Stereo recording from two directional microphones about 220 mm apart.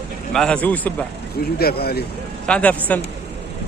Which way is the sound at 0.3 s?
5° left (ahead or behind).